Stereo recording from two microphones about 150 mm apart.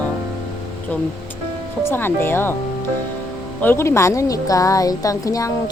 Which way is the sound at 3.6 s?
15° left (ahead or behind).